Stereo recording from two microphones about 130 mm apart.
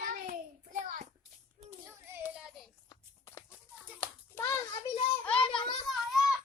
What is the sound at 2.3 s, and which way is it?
Child singing, 5° right (ahead or behind).